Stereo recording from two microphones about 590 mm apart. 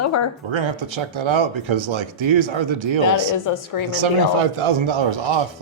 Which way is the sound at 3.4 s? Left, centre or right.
Left.